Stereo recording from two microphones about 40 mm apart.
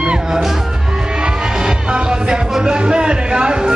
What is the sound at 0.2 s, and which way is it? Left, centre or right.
Music, centre.